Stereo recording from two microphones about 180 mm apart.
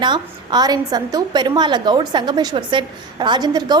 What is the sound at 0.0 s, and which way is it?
A woman's voice, 25° right (ahead or behind).